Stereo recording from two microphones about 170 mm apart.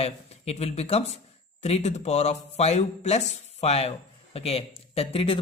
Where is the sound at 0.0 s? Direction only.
40° left (ahead or behind).